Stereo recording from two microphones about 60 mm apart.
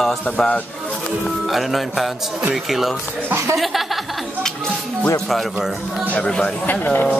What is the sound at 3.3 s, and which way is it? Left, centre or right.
Speech, right.